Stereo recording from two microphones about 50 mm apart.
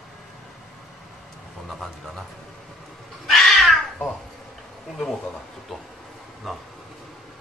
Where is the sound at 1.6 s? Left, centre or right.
Centre.